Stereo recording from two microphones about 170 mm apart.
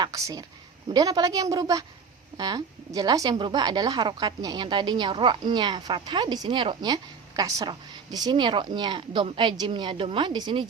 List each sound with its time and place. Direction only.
0.0 s a woman's voice: 20° right (ahead or behind)